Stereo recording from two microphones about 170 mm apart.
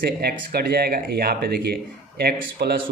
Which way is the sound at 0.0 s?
65° right (ahead or behind).